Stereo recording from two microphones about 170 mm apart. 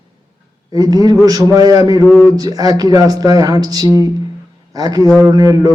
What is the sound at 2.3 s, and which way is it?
Speech, 20° right (ahead or behind).